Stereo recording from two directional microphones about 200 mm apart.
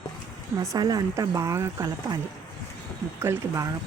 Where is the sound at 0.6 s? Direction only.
15° right (ahead or behind).